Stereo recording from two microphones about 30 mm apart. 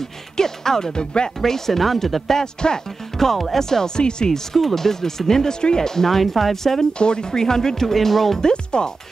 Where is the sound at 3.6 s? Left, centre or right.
Centre.